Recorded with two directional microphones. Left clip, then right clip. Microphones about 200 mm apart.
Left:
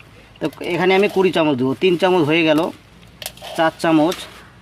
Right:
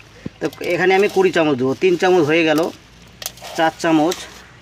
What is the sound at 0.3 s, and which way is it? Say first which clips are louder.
Speech: right 2 dB; 35° left (ahead or behind).